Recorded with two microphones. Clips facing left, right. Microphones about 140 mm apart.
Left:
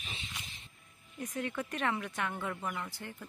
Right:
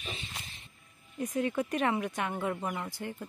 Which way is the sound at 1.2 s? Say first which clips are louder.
Right 6 dB; 15° right (ahead or behind).